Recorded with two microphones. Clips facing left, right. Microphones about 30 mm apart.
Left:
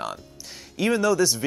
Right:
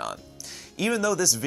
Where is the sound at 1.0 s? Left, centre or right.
Left.